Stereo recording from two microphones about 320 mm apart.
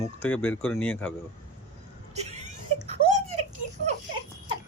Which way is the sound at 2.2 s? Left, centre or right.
Centre.